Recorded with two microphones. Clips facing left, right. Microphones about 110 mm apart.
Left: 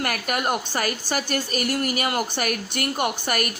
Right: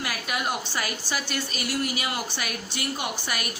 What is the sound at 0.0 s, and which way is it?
A woman's voice, 55° left (ahead or behind).